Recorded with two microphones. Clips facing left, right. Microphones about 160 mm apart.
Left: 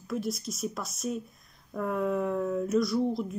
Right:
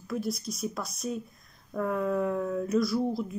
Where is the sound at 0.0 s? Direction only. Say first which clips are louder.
Even; centre (ahead or behind).